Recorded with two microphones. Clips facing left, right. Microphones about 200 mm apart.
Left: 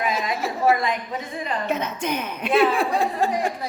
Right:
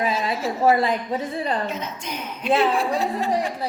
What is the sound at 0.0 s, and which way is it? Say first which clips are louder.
Speech: right 1 dB; 30° right (ahead or behind).